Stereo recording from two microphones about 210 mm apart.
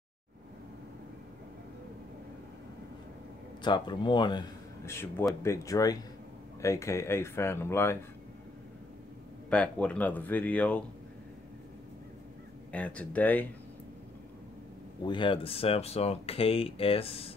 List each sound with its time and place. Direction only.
3.6 s speech: 20° left (ahead or behind)
9.5 s speech: 5° left (ahead or behind)
12.7 s speech: 5° left (ahead or behind)
15.0 s speech: 25° left (ahead or behind)